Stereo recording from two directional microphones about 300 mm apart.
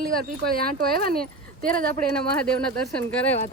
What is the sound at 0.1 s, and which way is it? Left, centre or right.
Speech, right.